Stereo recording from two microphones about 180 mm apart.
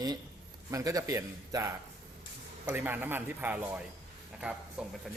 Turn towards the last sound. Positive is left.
turn(degrees=-5)  # may be behind; listen again after turning